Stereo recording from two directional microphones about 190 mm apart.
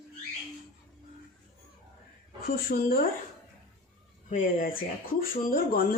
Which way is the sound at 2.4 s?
50° left (ahead or behind).